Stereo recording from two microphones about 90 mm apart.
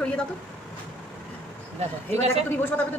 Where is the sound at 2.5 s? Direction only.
20° left (ahead or behind).